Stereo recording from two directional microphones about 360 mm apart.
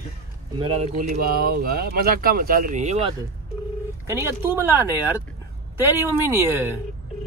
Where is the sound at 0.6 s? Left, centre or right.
Centre.